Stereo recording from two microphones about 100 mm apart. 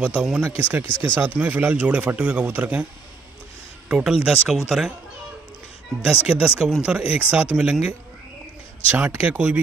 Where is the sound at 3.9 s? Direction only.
5° right (ahead or behind).